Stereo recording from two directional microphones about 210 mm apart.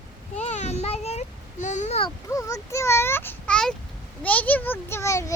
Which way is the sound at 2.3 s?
15° left (ahead or behind).